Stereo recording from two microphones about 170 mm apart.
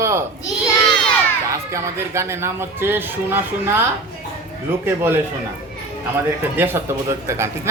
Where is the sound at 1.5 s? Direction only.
15° right (ahead or behind).